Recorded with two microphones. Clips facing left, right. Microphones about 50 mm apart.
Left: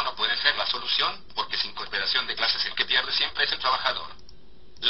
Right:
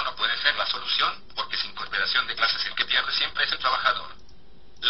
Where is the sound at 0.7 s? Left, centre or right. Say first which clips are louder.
Right 2 dB; centre.